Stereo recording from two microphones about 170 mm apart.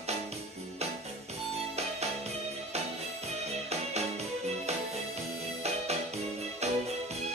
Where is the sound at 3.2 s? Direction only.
40° right (ahead or behind).